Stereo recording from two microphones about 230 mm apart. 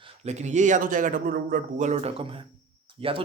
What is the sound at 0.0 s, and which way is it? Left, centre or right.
Speech, right.